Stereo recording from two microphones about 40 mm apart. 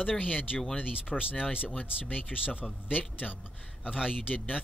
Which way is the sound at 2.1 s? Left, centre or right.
Left.